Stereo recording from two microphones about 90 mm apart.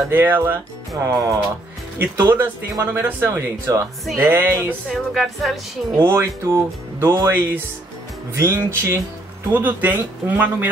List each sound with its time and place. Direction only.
0.1 s speech: 25° right (ahead or behind)
0.9 s speech: 40° right (ahead or behind)
2.0 s speech: 25° right (ahead or behind)
4.9 s music: 5° left (ahead or behind)
5.9 s speech: 25° right (ahead or behind)